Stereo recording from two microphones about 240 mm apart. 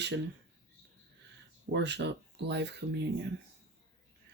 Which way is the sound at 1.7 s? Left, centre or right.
Right.